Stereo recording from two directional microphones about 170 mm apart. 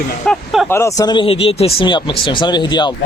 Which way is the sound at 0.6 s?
15° left (ahead or behind).